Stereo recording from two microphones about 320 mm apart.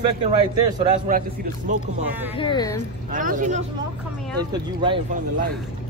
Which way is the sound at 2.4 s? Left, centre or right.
Centre.